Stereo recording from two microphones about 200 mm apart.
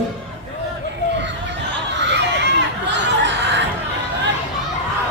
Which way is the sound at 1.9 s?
60° right (ahead or behind).